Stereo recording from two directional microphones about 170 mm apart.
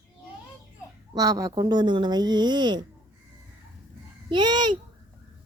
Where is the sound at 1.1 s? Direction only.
20° right (ahead or behind).